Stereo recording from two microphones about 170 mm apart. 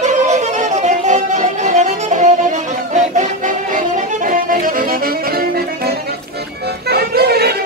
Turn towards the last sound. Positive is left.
turn(degrees=-70)  # may be behind; listen again after turning